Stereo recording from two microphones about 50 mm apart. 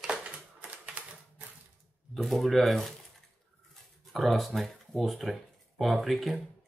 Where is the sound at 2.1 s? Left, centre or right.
Centre.